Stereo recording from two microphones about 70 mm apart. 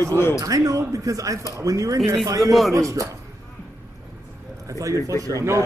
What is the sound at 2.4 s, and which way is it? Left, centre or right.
Speech, centre.